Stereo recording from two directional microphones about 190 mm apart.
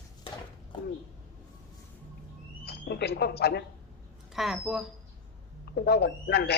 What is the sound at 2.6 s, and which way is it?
Speech, 60° left (ahead or behind).